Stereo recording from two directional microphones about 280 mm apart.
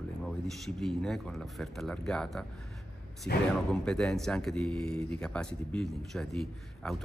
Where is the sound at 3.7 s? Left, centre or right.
Centre.